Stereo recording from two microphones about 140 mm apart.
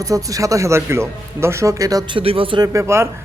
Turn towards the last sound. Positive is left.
turn(degrees=-20)  # may be behind; listen again after turning